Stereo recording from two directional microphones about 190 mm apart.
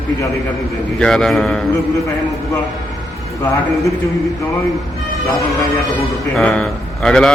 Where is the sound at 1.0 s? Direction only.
5° left (ahead or behind).